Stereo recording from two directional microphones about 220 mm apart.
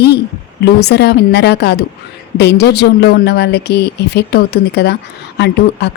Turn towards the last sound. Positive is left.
turn(degrees=50)  # may be behind; listen again after turning